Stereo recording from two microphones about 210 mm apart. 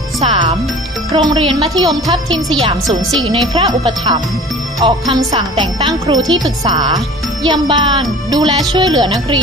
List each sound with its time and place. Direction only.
0.2 s music: 25° right (ahead or behind)
1.1 s speech: 25° right (ahead or behind)
5.3 s speech: 20° right (ahead or behind)